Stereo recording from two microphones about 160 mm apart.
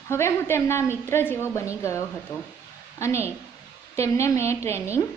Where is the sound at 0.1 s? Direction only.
15° left (ahead or behind).